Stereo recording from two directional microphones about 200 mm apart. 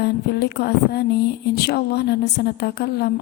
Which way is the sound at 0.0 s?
55° left (ahead or behind).